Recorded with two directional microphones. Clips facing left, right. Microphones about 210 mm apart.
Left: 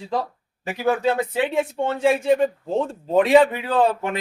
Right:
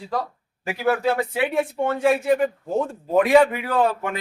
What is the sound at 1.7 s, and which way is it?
Speech, 20° left (ahead or behind).